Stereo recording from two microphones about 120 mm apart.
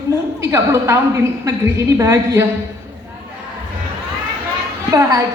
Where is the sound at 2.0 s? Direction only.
25° right (ahead or behind).